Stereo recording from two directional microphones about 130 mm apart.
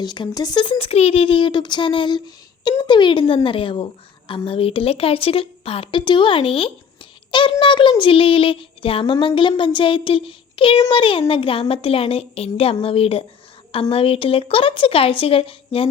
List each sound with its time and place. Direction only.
0.0 s a woman's voice: 35° left (ahead or behind)